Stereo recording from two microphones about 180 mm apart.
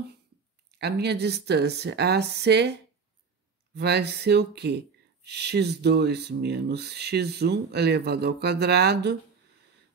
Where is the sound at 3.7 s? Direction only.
65° right (ahead or behind).